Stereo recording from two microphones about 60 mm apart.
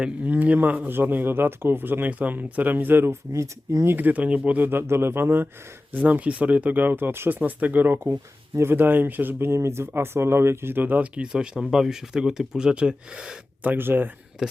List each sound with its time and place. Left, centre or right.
0.3 s speech: right
3.3 s speech: right
3.8 s speech: right
4.8 s speech: right
9.4 s speech: right; by 13.4 s centre
13.6 s speech: right